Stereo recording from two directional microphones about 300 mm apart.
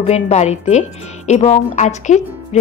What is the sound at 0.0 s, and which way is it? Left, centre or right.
A woman's voice, left.